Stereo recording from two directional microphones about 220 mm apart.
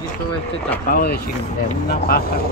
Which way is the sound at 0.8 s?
40° left (ahead or behind).